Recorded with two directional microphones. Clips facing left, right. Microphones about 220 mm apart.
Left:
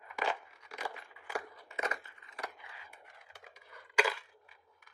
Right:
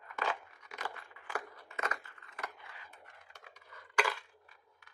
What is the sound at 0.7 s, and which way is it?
Crushing, 10° left (ahead or behind).